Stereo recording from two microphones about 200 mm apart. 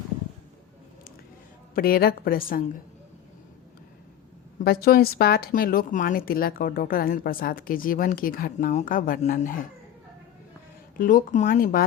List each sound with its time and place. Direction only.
1.7 s a woman's voice: 50° left (ahead or behind)
4.6 s a woman's voice: 50° left (ahead or behind)
10.9 s a woman's voice: 40° left (ahead or behind)